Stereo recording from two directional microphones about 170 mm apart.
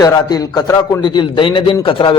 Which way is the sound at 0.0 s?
20° left (ahead or behind).